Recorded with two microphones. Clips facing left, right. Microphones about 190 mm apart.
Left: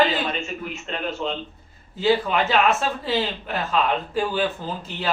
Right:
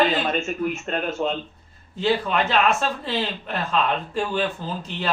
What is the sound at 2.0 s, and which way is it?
Speech, 5° left (ahead or behind).